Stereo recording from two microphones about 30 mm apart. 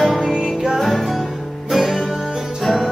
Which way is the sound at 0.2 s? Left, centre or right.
Centre.